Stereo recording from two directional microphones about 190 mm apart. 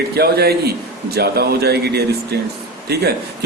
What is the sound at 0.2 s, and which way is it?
A man's voice, 55° right (ahead or behind).